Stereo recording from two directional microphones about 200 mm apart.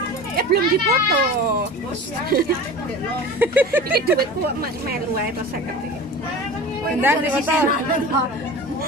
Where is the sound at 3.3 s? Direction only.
10° right (ahead or behind).